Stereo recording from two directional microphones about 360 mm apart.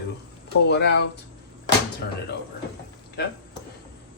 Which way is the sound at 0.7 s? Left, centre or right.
Left.